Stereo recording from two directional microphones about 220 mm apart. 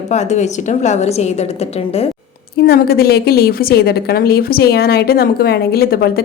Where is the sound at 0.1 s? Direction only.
30° left (ahead or behind).